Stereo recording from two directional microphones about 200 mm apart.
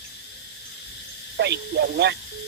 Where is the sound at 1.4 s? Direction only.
55° right (ahead or behind).